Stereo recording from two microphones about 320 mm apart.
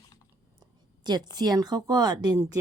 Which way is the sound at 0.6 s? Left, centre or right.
Centre.